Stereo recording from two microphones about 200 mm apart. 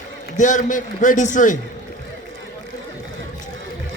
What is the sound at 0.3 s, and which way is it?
A man's voice, 40° left (ahead or behind).